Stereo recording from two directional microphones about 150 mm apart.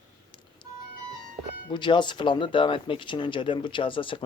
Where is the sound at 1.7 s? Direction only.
30° left (ahead or behind).